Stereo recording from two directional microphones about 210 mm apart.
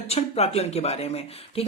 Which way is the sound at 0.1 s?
30° left (ahead or behind).